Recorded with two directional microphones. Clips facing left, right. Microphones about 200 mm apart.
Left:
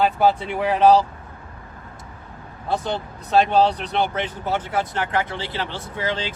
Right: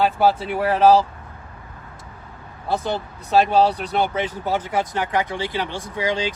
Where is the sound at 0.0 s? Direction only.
5° right (ahead or behind).